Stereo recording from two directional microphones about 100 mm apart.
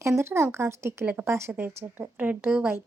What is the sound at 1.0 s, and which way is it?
Speech, 15° right (ahead or behind).